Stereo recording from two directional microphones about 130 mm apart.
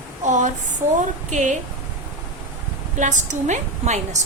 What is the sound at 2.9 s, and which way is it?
A woman's voice, 70° right (ahead or behind).